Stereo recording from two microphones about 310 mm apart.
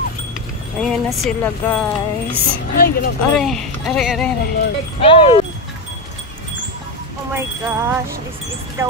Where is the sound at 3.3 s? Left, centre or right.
Centre.